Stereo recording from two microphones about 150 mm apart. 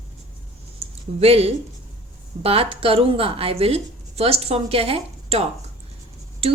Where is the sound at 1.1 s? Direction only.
40° right (ahead or behind).